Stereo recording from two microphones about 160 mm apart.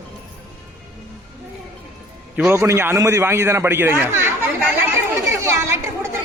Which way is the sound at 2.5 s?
15° right (ahead or behind).